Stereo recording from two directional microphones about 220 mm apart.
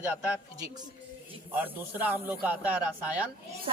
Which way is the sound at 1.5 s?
10° right (ahead or behind).